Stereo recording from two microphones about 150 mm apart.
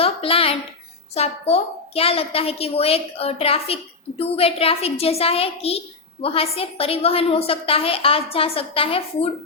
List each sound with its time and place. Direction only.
0.0 s a woman's voice: 40° left (ahead or behind)